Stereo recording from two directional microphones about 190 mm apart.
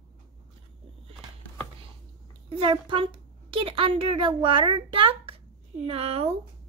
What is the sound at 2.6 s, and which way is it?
A woman's voice, 25° right (ahead or behind).